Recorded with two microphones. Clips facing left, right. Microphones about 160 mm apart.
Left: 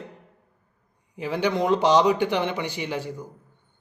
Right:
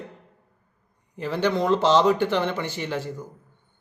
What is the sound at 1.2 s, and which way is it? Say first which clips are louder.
Speech: even; 15° left (ahead or behind).